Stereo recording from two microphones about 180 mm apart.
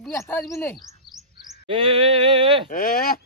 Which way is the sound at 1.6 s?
30° right (ahead or behind).